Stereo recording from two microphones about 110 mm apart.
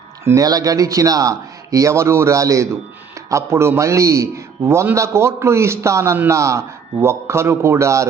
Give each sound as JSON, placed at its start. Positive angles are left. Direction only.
{"t": 0.3, "sound": "a man's voice", "side_deg": -35}